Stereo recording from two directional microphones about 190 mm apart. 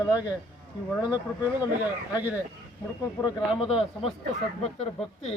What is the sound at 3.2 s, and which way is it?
Speech, 25° left (ahead or behind).